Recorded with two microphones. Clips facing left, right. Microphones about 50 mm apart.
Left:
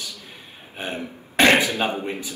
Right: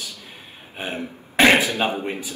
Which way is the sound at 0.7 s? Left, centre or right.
Centre.